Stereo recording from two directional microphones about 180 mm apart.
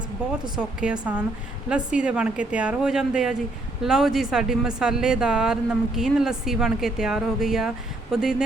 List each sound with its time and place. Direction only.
0.5 s speech: 5° right (ahead or behind)